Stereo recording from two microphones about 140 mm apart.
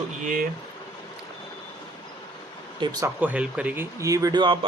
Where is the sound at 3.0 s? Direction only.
10° right (ahead or behind); by 4.5 s 30° right (ahead or behind).